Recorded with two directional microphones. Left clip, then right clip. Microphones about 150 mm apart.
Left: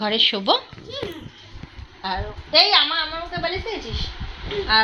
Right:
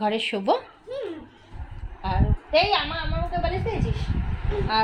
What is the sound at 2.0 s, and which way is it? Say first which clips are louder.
Speech: left 2 dB; 10° left (ahead or behind).